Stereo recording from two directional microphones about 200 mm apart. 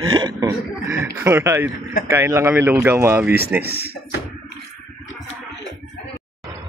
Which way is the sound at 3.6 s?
55° right (ahead or behind).